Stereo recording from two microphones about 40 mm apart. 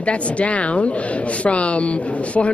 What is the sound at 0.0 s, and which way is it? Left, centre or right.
A man's voice, left.